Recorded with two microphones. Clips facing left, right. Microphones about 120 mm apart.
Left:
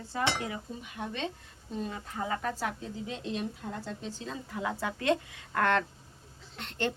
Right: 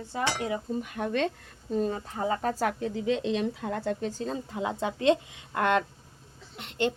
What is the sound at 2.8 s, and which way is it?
Speech, 80° right.